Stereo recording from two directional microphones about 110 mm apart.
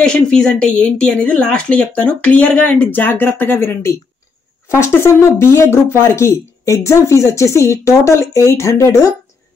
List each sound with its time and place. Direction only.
0.0 s speech: 5° left (ahead or behind); by 9.1 s 25° left (ahead or behind)